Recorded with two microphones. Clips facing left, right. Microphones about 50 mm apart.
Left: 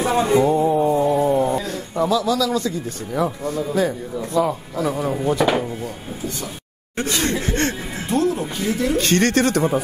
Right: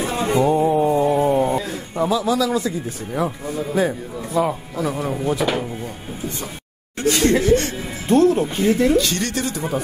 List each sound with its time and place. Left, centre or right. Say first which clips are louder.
0.3 s a sound: right 1 dB; right
0.6 s a sound: even; centre
3.4 s speech: even; centre
7.0 s speech: right 5 dB; left
8.1 s speech: right 5 dB; right
8.9 s speech: left 2 dB; left